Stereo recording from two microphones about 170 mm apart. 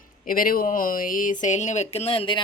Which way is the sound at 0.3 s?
55° left (ahead or behind).